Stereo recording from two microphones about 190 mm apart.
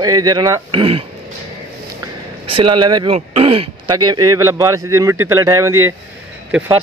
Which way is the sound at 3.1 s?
30° right (ahead or behind).